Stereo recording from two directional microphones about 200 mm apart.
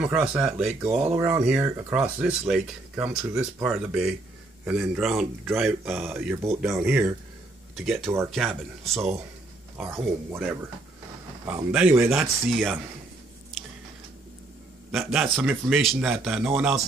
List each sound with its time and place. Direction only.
0.0 s a man's voice: 5° right (ahead or behind)
0.8 s speech: 30° right (ahead or behind)
1.1 s a man's voice: 15° right (ahead or behind)
9.8 s a man's voice: 10° right (ahead or behind)
13.5 s a sound: centre (ahead or behind)
14.9 s a man's voice: centre (ahead or behind)